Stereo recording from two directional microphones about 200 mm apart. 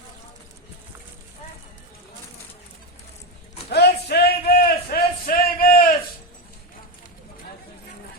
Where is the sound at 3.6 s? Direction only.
55° left (ahead or behind).